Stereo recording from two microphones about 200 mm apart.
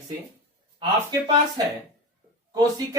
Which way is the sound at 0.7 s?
25° right (ahead or behind).